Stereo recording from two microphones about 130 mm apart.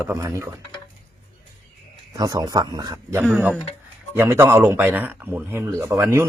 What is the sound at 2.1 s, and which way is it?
Speech, 30° right (ahead or behind).